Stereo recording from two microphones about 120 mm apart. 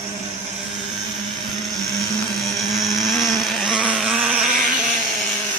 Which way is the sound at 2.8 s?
Centre (ahead or behind).